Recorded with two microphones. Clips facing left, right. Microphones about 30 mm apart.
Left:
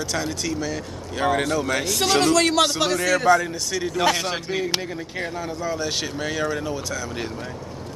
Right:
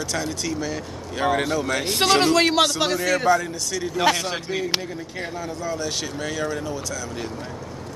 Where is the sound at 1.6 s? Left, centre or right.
Centre.